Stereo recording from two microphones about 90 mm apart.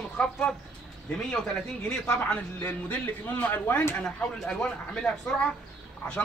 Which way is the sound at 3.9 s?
10° left (ahead or behind).